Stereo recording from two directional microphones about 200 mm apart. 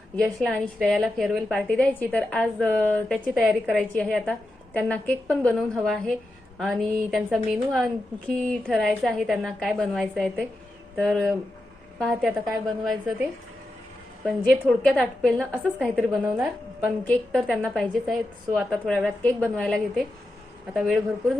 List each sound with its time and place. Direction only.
0.2 s a woman's voice: 5° left (ahead or behind)
14.3 s a woman's voice: centre (ahead or behind)